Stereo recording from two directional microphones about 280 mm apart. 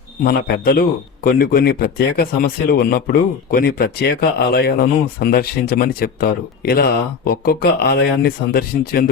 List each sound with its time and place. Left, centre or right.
0.3 s speech: left